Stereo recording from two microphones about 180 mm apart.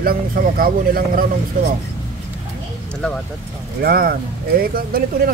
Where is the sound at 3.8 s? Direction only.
55° right (ahead or behind).